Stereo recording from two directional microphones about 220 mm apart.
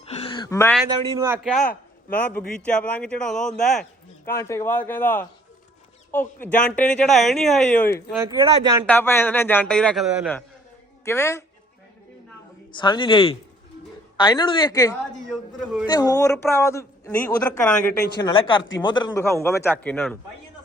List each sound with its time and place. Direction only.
0.0 s a sound: 25° left (ahead or behind)
1.1 s speech: 10° right (ahead or behind)
2.1 s a man's voice: 5° left (ahead or behind)
4.3 s a man's voice: 10° left (ahead or behind)
8.2 s speech: 20° right (ahead or behind)
8.9 s a man's voice: 10° left (ahead or behind)
11.0 s a woman's voice: 10° left (ahead or behind)
12.8 s speech: 20° left (ahead or behind)
15.3 s speech: centre (ahead or behind)
15.9 s a man's voice: 15° left (ahead or behind)
18.2 s a man's voice: 20° left (ahead or behind)